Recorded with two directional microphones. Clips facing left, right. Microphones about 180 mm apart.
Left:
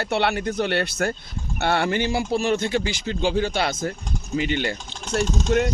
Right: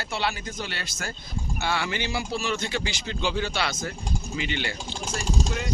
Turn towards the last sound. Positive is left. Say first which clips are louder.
# left 12 dB
turn(degrees=60)  # may be behind; listen again after turning